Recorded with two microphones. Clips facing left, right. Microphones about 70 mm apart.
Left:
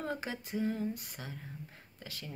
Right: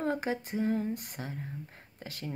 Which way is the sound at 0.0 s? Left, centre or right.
Right.